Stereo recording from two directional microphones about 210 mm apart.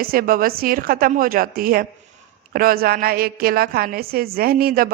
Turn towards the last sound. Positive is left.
turn(degrees=-45)  # may be behind; listen again after turning